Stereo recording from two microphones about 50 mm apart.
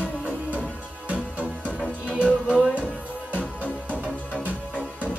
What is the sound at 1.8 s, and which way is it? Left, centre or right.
Music, left.